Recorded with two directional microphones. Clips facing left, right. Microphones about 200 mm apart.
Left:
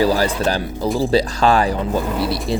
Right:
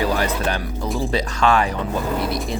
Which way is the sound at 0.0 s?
35° left (ahead or behind).